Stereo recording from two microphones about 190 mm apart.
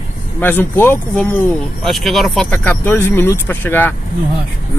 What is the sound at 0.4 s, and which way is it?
Speech, 10° left (ahead or behind).